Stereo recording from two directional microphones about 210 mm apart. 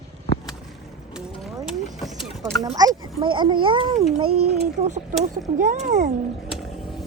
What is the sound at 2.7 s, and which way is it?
A child's voice, 20° right (ahead or behind).